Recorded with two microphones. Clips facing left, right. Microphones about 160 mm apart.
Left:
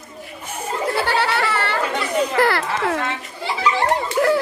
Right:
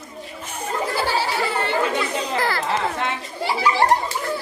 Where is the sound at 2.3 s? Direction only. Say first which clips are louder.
Left 3 dB; 70° left (ahead or behind).